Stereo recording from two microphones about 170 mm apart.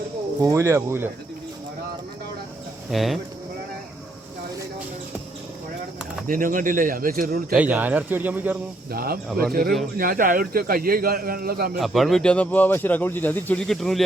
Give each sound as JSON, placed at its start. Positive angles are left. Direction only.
{"t": 0.4, "sound": "speech", "side_deg": -15}
{"t": 2.9, "sound": "speech", "side_deg": 0}
{"t": 6.2, "sound": "speech", "side_deg": -50}
{"t": 7.5, "sound": "speech", "side_deg": -10}
{"t": 8.9, "sound": "a man's voice", "side_deg": -60}
{"t": 11.8, "sound": "speech", "side_deg": 0}